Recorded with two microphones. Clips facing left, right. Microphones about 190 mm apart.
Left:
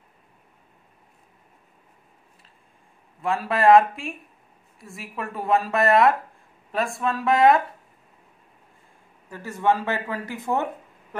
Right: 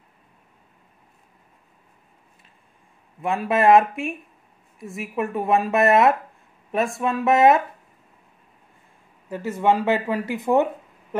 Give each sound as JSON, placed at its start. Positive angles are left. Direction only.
{"t": 3.2, "sound": "a woman's voice", "side_deg": -20}
{"t": 9.3, "sound": "speech", "side_deg": -20}